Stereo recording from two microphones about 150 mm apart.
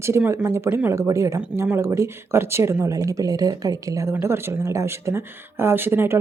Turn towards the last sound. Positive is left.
turn(degrees=-15)  # may be behind; listen again after turning